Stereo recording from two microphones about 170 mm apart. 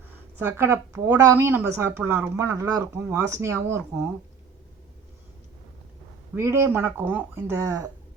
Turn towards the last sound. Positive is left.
turn(degrees=-20)  # may be behind; listen again after turning